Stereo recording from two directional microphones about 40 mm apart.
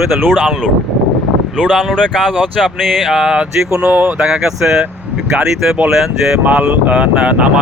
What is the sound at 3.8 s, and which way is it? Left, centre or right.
Speech, right.